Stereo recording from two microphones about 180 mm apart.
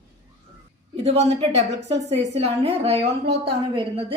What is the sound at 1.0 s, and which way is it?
A woman's voice, 35° right (ahead or behind).